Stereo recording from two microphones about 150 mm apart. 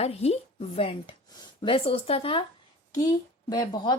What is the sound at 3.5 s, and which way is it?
Speech, 25° left (ahead or behind).